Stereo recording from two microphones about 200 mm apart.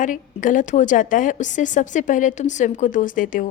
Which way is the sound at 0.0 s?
40° left (ahead or behind).